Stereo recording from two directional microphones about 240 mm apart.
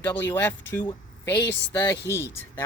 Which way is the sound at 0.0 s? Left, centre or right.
Centre.